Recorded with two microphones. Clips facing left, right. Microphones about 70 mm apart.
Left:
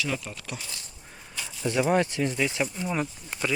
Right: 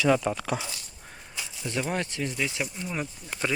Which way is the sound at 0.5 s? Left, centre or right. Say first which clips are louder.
Right 7 dB; right.